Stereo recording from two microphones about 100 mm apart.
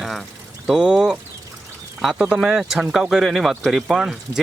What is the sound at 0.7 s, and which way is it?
Speech, 5° right (ahead or behind).